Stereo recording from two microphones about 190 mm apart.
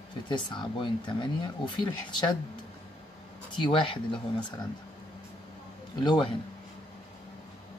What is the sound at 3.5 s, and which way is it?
Speech, 25° left (ahead or behind).